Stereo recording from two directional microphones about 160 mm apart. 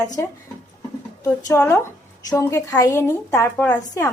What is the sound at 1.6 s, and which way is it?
A woman's voice, 15° left (ahead or behind).